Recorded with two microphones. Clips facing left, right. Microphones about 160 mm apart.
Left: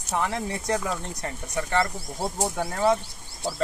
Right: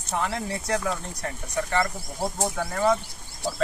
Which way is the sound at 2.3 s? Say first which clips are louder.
Even; 15° left (ahead or behind).